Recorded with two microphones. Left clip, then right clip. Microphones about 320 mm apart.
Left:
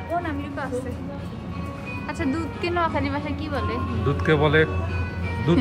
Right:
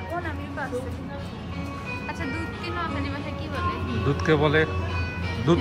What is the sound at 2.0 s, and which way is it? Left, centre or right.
Speech, left.